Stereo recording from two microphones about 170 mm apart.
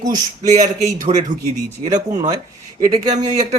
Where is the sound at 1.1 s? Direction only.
35° right (ahead or behind).